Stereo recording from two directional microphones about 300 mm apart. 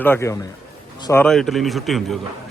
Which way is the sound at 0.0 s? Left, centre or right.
Centre.